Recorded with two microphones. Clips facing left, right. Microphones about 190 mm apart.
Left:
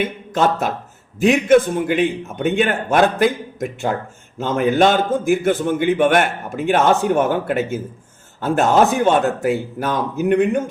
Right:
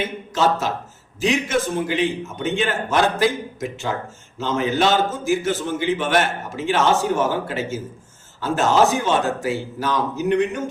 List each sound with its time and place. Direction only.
0.0 s a man's voice: 55° left (ahead or behind)